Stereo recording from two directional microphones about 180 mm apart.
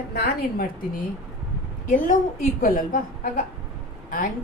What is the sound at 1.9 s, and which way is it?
A woman's voice, 50° left (ahead or behind).